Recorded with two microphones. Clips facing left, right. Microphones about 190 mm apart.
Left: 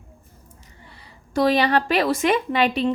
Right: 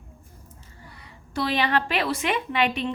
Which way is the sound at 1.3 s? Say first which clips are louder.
Left 6 dB; 45° left (ahead or behind).